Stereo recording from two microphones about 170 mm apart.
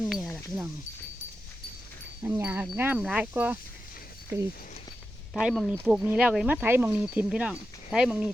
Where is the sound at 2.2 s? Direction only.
10° right (ahead or behind).